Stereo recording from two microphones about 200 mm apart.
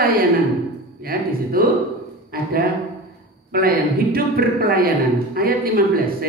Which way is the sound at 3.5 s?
45° right (ahead or behind).